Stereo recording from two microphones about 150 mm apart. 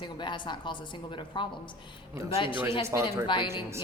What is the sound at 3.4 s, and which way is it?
Speech, 20° right (ahead or behind).